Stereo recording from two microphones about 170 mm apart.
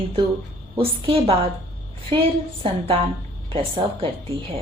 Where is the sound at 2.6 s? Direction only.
30° right (ahead or behind).